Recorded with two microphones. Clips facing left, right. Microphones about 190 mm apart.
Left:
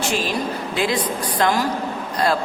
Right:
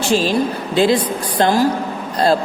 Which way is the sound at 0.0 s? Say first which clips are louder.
Right 6 dB; 30° right (ahead or behind).